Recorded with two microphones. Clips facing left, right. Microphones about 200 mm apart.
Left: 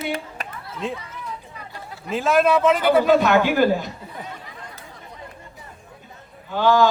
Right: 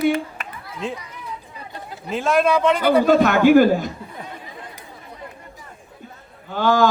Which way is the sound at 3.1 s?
50° right (ahead or behind).